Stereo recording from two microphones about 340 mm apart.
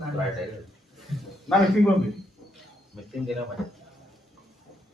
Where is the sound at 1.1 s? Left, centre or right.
Centre.